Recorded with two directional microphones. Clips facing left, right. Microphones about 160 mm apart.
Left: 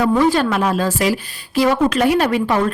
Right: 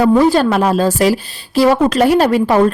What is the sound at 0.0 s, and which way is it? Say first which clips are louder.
Speech: right 4 dB; 35° right (ahead or behind).